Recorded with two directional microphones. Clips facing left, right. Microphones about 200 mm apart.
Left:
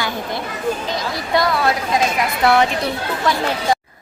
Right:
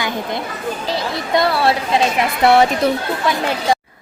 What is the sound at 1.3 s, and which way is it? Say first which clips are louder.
Speech: right 2 dB; 30° right (ahead or behind).